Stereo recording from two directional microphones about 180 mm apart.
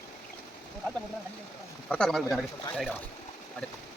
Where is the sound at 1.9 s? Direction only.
Centre (ahead or behind).